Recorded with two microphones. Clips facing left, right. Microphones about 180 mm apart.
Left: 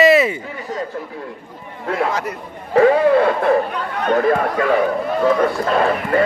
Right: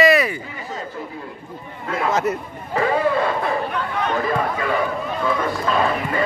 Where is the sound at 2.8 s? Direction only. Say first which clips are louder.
Left 7 dB; 65° left (ahead or behind).